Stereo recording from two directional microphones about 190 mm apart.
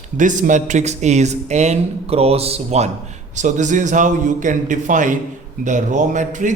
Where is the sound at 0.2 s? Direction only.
40° right (ahead or behind).